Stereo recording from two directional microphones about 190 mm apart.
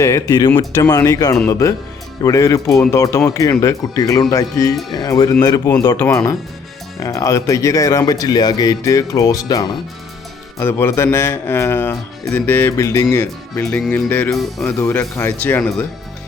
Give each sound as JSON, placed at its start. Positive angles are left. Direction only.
{"t": 0.0, "sound": "speech", "side_deg": 15}